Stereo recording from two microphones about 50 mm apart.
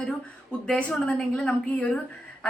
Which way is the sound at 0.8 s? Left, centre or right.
Left.